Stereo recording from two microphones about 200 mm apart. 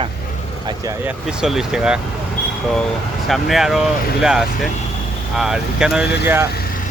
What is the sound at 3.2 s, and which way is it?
Speech, centre (ahead or behind).